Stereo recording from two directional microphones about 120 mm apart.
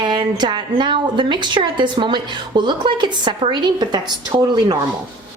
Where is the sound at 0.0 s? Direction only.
40° right (ahead or behind).